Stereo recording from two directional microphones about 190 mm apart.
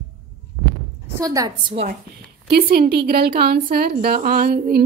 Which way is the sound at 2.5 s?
55° right (ahead or behind).